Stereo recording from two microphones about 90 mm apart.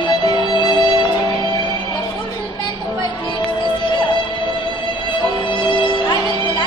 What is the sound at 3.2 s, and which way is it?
Music, 60° left (ahead or behind).